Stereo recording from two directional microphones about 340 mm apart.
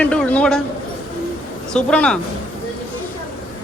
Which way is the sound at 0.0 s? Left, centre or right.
Centre.